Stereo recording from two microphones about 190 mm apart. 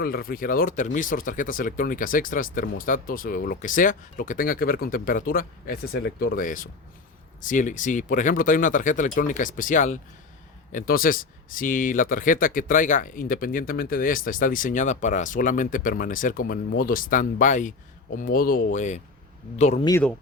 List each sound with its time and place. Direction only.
0.0 s speech: 50° left (ahead or behind)